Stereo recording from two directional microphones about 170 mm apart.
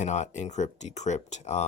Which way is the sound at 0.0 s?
45° left (ahead or behind).